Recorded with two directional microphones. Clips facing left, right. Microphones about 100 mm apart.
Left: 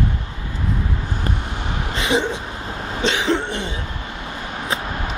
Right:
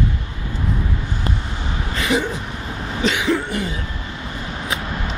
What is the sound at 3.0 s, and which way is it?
Cough, 30° left (ahead or behind).